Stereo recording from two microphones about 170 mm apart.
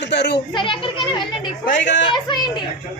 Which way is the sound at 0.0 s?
85° left.